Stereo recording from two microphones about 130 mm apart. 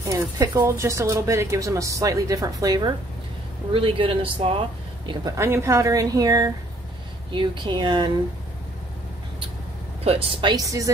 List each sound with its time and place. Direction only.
0.6 s speech: 20° right (ahead or behind)
3.7 s speech: 45° right (ahead or behind)
5.2 s speech: 20° right (ahead or behind)
10.0 s speech: 45° right (ahead or behind)
10.5 s speech: 25° right (ahead or behind)